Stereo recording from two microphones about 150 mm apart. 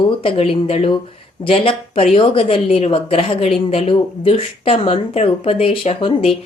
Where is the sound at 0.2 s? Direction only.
40° left (ahead or behind).